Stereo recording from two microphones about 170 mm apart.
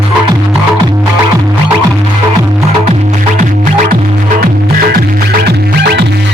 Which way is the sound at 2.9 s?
45° right (ahead or behind).